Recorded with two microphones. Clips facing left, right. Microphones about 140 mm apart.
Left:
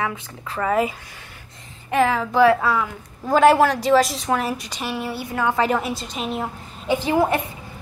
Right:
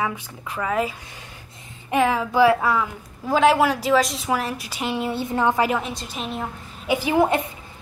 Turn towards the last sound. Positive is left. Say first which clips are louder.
# even
turn(degrees=-15)  # may be behind; listen again after turning